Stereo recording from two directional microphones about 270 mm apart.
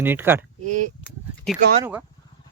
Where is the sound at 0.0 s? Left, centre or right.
Centre.